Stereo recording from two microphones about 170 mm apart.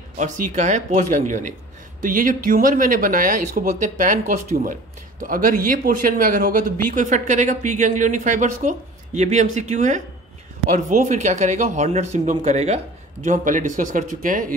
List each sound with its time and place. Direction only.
0.2 s speech: 45° right (ahead or behind)